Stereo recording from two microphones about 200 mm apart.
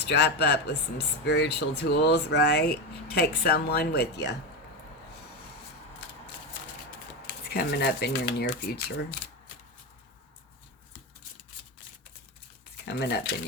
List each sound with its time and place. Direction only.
0.0 s speech: 60° left (ahead or behind)
7.5 s speech: 55° left (ahead or behind)
12.7 s speech: 55° left (ahead or behind)